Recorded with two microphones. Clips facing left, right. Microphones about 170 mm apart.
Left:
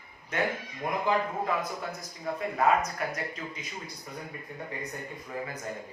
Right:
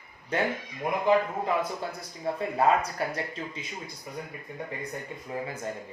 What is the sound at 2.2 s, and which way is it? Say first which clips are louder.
Speech: right 2 dB; 30° right (ahead or behind).